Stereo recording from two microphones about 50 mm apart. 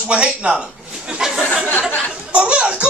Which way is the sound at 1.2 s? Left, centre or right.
Centre.